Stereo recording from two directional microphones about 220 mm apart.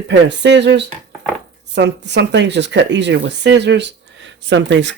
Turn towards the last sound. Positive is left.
turn(degrees=-55)  # may be behind; listen again after turning